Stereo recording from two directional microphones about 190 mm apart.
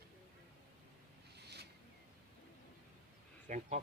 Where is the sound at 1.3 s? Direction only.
60° right (ahead or behind).